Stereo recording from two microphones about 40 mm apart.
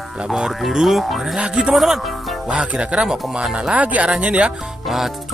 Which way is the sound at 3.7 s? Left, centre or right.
Right.